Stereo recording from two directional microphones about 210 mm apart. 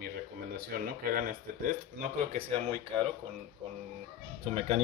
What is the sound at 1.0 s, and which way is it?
Speech, 40° right (ahead or behind).